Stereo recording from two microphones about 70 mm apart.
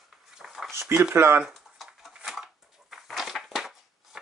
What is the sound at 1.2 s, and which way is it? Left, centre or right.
Speech, right.